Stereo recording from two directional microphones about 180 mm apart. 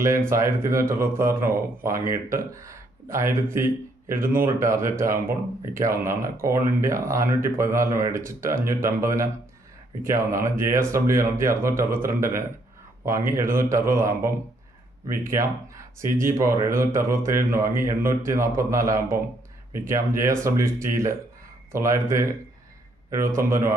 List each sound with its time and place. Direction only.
0.3 s speech: 15° right (ahead or behind)